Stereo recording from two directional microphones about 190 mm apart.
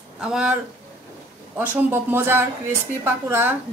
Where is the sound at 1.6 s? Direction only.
10° right (ahead or behind).